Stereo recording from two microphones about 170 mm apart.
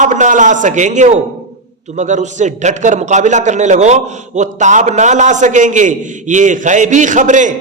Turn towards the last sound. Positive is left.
turn(degrees=-45)  # may be behind; listen again after turning